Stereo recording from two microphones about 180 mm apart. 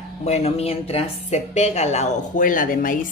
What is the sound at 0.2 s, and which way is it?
A woman's voice, 35° left (ahead or behind).